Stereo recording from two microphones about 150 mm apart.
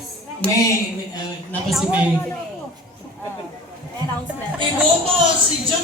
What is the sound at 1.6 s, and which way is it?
Speech, 5° right (ahead or behind).